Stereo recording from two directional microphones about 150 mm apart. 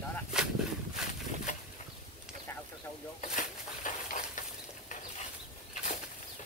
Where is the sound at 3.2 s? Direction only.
55° left (ahead or behind).